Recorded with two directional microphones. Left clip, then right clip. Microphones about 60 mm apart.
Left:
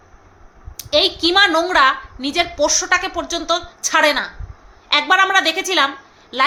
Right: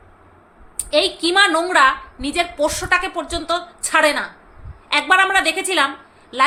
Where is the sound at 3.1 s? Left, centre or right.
Left.